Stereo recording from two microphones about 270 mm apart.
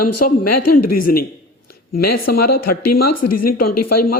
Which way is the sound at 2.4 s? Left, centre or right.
Left.